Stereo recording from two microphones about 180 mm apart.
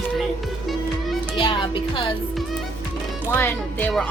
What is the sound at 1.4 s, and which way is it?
Music, 30° left (ahead or behind).